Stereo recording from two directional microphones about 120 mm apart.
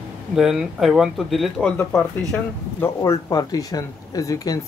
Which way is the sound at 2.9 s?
30° left (ahead or behind).